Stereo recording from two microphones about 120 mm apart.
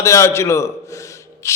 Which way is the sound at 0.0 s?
25° left (ahead or behind).